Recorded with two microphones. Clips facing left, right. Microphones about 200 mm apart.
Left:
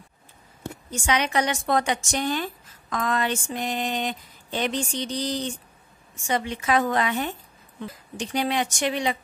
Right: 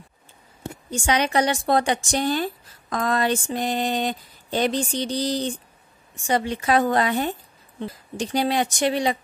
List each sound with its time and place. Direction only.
0.8 s a woman's voice: 30° right (ahead or behind)